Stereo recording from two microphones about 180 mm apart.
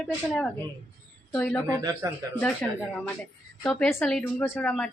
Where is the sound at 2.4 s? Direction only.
5° left (ahead or behind).